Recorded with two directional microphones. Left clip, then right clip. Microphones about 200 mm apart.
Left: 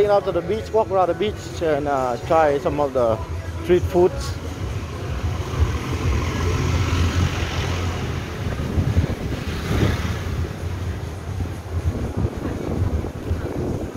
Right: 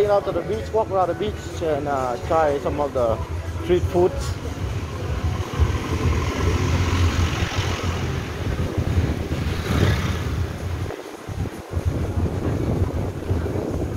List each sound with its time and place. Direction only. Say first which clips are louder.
0.0 s speech: left 2 dB; 30° left (ahead or behind)
3.6 s speech: left 2 dB; 20° left (ahead or behind)